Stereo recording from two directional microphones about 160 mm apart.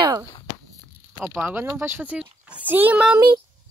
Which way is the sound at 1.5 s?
15° right (ahead or behind).